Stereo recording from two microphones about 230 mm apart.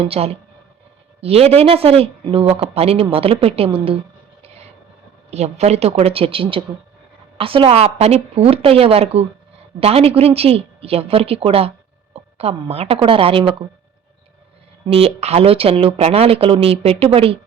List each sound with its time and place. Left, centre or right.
0.0 s speech: right
4.4 s vehicle: right
5.3 s a woman's voice: right
14.8 s speech: right